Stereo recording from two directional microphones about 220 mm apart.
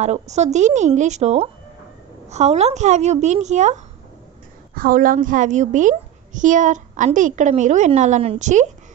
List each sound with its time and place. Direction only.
0.0 s a woman's voice: 30° right (ahead or behind)